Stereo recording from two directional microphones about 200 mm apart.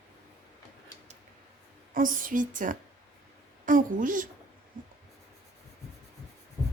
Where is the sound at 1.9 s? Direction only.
40° right (ahead or behind).